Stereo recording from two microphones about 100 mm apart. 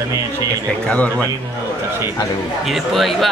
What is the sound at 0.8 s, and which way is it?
Speech, 10° left (ahead or behind).